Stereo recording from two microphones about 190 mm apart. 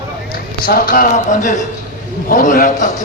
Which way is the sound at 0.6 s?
50° left (ahead or behind).